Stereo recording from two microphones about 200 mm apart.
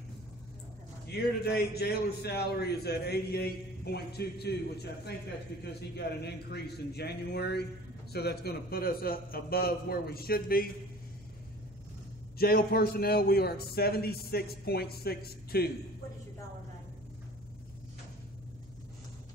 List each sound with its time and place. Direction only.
1.4 s a man's voice: 50° left (ahead or behind)
12.4 s a man's voice: 50° left (ahead or behind)